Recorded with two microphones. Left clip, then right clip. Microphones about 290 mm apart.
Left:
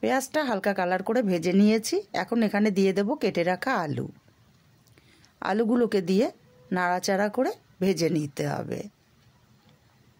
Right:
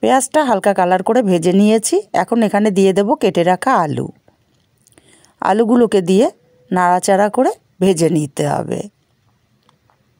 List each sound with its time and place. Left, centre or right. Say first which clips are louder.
0.0 s speech: right 12 dB; right